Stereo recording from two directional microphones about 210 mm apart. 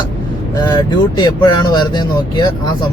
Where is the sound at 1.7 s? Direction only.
20° left (ahead or behind).